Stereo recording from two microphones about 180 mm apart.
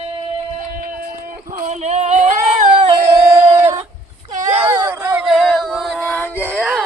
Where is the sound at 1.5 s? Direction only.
35° right (ahead or behind).